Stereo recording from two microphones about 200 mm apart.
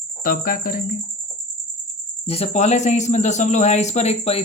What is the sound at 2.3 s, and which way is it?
Speech, 35° left (ahead or behind).